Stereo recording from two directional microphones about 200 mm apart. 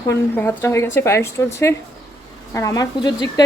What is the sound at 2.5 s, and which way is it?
Speech, 15° left (ahead or behind).